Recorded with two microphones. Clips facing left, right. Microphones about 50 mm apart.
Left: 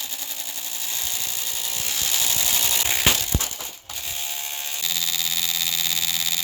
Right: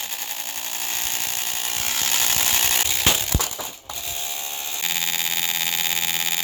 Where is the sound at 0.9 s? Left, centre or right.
Right.